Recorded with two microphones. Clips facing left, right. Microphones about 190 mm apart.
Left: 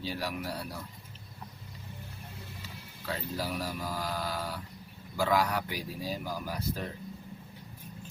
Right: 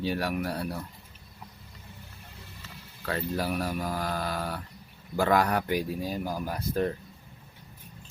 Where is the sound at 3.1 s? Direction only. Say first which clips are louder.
Right 5 dB; 60° right (ahead or behind).